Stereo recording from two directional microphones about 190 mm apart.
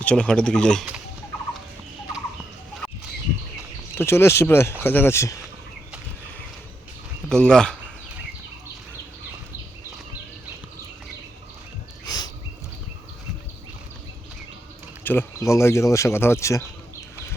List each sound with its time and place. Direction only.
0.0 s speech: 5° left (ahead or behind)
3.9 s speech: 15° left (ahead or behind)
7.3 s speech: 5° left (ahead or behind)
12.0 s a sound: 20° left (ahead or behind)
15.0 s speech: 10° left (ahead or behind)